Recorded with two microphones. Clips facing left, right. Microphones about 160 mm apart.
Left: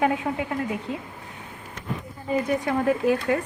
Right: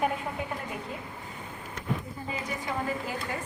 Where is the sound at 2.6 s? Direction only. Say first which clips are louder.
Left 10 dB; 70° left (ahead or behind).